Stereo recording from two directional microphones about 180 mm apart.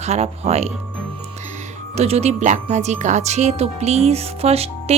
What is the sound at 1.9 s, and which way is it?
Speech, 35° right (ahead or behind).